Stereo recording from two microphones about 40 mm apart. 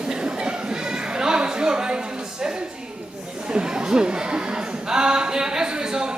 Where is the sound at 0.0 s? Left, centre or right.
Right.